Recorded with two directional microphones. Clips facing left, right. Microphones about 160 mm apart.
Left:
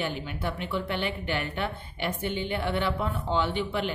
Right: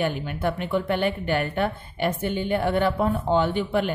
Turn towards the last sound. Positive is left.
turn(degrees=-50)  # may be behind; listen again after turning